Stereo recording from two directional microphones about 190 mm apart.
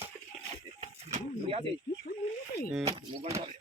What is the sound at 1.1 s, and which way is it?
Pigeon, 30° right (ahead or behind).